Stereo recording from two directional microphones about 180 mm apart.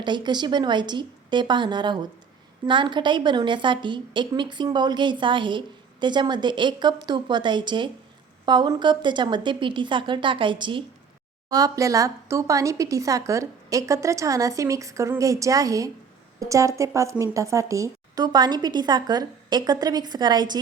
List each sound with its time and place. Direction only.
0.0 s a woman's voice: 25° right (ahead or behind)